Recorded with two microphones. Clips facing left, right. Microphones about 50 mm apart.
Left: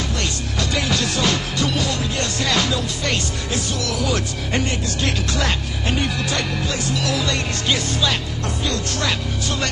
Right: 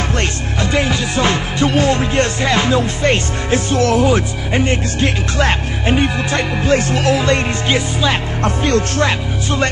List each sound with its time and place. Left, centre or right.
0.2 s music: right
8.4 s music: right